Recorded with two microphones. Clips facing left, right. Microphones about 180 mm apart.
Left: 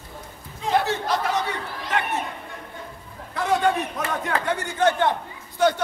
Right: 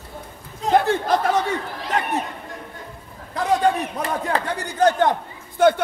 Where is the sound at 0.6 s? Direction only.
50° right (ahead or behind).